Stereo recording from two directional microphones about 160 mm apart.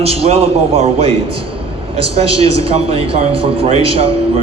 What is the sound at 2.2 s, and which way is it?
A man's voice, 35° right (ahead or behind).